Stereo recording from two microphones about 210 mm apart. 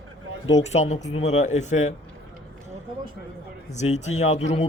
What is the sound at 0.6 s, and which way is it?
A man's voice, 30° left (ahead or behind).